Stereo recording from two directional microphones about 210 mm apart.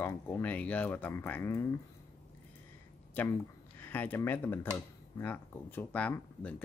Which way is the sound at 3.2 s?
10° left (ahead or behind).